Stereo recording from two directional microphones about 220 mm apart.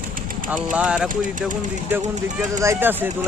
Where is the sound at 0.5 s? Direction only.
5° right (ahead or behind).